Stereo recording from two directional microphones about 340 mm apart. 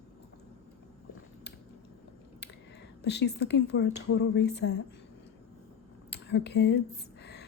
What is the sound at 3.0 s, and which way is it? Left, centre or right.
A woman's voice, left.